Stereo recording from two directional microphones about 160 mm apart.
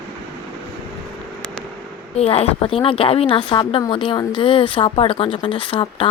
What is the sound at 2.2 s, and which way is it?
Speech, 40° left (ahead or behind).